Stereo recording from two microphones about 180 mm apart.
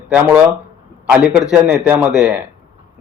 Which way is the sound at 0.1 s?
10° right (ahead or behind).